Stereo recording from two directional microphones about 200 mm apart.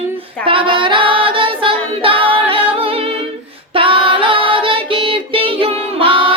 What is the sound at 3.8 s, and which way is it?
Child singing, 25° right (ahead or behind).